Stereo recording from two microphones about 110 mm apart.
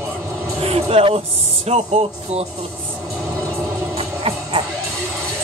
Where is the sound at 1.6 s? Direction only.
70° right (ahead or behind).